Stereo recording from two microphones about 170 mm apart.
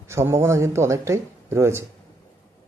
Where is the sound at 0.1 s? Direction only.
15° right (ahead or behind).